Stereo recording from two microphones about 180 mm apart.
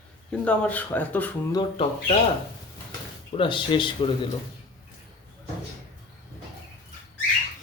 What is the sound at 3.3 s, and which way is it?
Speech, 30° left (ahead or behind).